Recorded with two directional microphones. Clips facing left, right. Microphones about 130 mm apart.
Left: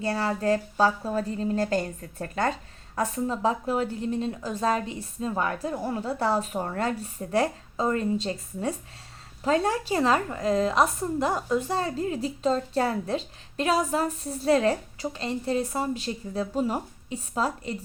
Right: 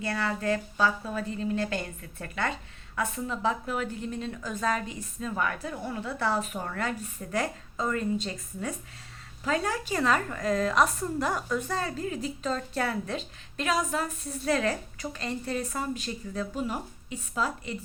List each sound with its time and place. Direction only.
0.0 s a woman's voice: 35° left (ahead or behind)